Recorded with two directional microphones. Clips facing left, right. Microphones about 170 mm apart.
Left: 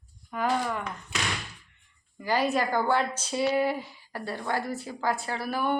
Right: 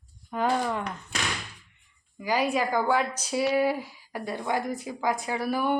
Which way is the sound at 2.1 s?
10° right (ahead or behind).